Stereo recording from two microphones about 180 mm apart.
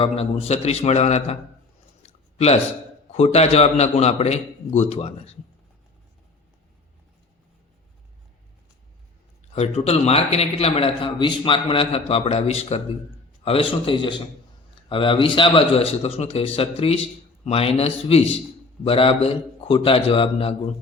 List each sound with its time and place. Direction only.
0.0 s a man's voice: 35° left (ahead or behind)
2.0 s a sound: 35° left (ahead or behind)
3.1 s a man's voice: 35° left (ahead or behind)
9.6 s a man's voice: 35° left (ahead or behind)